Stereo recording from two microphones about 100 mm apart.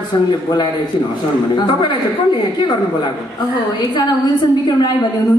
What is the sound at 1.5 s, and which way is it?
Speech, 50° left (ahead or behind).